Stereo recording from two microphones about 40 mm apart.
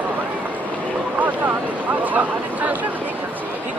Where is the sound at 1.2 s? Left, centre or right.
Right.